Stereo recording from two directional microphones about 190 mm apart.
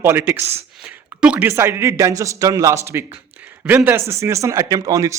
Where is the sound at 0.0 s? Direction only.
10° right (ahead or behind).